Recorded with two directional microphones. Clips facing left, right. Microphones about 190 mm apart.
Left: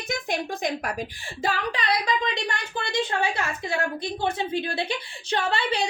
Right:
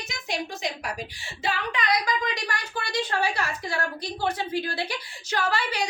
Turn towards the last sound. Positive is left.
turn(degrees=25)  # may be behind; listen again after turning